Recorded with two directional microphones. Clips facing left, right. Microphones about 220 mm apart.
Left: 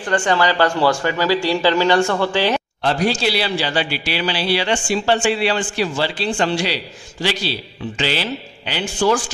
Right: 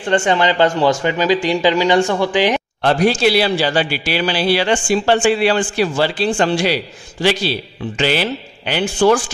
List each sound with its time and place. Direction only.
0.0 s speech: 25° right (ahead or behind)
2.8 s a man's voice: 60° right (ahead or behind)